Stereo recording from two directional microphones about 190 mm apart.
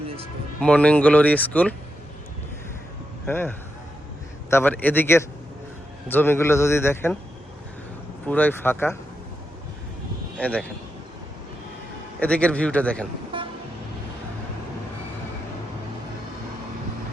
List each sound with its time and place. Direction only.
0.6 s speech: 5° left (ahead or behind)
3.2 s speech: 10° left (ahead or behind)
8.3 s speech: 10° left (ahead or behind)
10.3 s speech: 5° left (ahead or behind)
12.2 s speech: 5° left (ahead or behind)
13.3 s vehicle: 25° right (ahead or behind)